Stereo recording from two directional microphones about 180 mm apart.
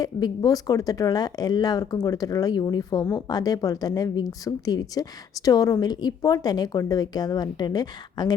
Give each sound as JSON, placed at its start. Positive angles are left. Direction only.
{"t": 0.0, "sound": "speech", "side_deg": 20}